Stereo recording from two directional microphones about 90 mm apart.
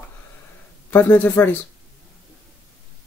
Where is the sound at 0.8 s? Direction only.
20° left (ahead or behind).